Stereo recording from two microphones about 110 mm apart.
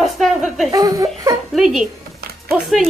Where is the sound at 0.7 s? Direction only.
30° right (ahead or behind).